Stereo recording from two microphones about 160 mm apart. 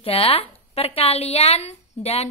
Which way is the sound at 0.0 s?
35° left (ahead or behind).